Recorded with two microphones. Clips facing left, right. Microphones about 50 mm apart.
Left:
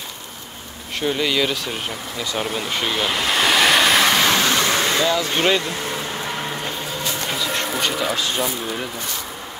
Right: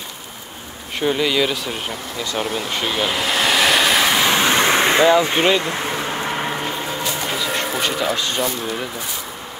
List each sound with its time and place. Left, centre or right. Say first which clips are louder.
0.9 s speech: right 2 dB; centre
4.4 s vehicle: right 3 dB; right
5.6 s a sound: right 3 dB; right; by 8.8 s centre